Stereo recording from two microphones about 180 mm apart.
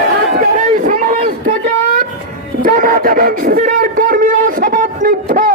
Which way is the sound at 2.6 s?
50° right (ahead or behind).